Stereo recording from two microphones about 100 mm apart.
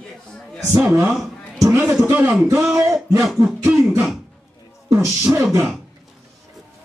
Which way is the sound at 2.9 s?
Centre (ahead or behind).